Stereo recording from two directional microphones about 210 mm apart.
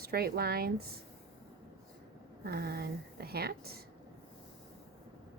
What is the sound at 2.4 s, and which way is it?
A woman's voice, 45° right (ahead or behind).